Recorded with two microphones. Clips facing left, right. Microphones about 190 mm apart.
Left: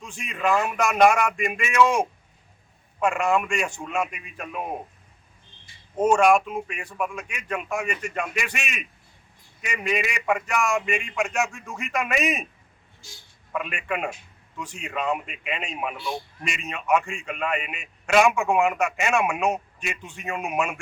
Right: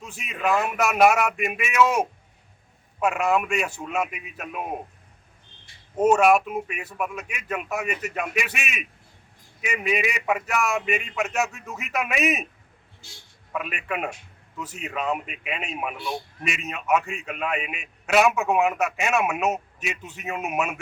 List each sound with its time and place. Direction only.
0.0 s a man's voice: 5° right (ahead or behind)
6.0 s a man's voice: 5° right (ahead or behind)
13.5 s a man's voice: 5° right (ahead or behind)